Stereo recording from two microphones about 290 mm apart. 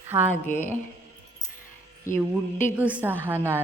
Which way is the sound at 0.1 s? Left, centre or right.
Centre.